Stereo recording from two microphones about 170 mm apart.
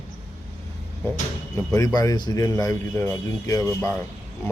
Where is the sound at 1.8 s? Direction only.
20° left (ahead or behind).